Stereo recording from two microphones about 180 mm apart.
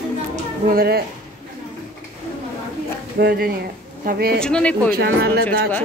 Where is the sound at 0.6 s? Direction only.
55° right (ahead or behind).